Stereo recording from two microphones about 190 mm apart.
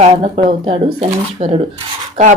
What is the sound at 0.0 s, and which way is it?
Speech, 30° right (ahead or behind).